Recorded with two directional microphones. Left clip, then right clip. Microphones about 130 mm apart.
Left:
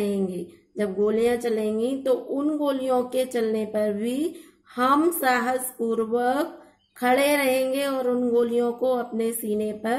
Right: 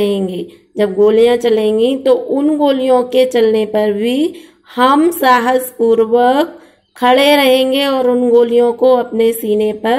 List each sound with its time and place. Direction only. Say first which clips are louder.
0.0 s speech: right 11 dB; 25° right (ahead or behind)